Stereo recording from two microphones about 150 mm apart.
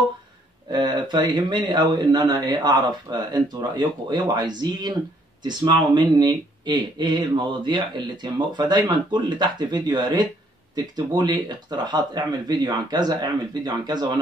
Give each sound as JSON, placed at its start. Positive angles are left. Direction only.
{"t": 0.7, "sound": "speech", "side_deg": -30}